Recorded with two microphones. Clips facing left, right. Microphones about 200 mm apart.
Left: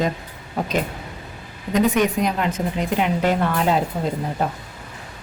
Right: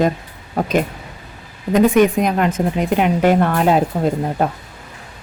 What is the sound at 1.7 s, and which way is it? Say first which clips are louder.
A woman's voice: right 6 dB; 50° right (ahead or behind).